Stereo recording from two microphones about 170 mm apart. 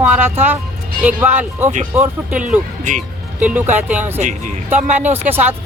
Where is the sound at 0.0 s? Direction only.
10° right (ahead or behind).